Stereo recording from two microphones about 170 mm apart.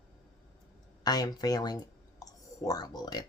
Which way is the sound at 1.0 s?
20° left (ahead or behind).